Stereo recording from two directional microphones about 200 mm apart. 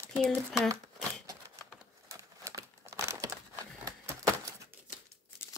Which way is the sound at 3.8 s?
15° right (ahead or behind).